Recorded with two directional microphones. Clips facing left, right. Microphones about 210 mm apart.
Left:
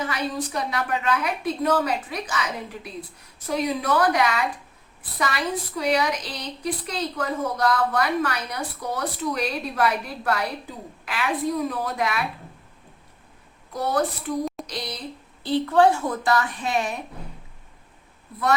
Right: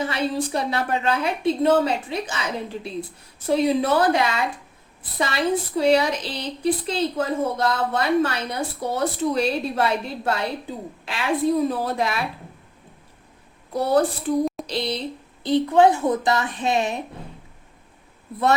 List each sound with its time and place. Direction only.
0.0 s speech: 30° right (ahead or behind)
13.7 s speech: 30° right (ahead or behind)